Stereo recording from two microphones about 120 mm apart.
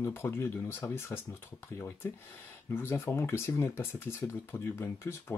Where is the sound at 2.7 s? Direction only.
20° left (ahead or behind).